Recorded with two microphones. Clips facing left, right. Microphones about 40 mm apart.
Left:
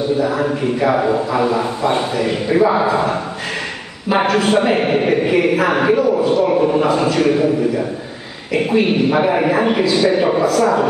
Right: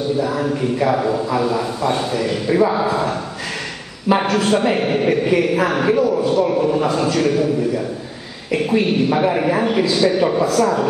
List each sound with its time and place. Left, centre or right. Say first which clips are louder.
0.2 s a man's voice: left 2 dB; centre
4.2 s a man's voice: left 7 dB; centre